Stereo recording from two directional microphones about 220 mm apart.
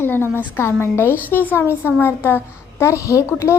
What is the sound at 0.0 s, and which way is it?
A woman's voice, 10° left (ahead or behind).